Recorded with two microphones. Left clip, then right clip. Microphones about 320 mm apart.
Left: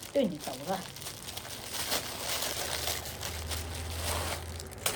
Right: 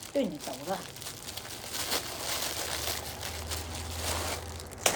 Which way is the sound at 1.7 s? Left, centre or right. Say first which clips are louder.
Right 1 dB; centre.